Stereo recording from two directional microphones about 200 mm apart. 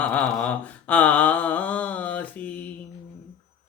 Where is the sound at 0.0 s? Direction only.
5° left (ahead or behind).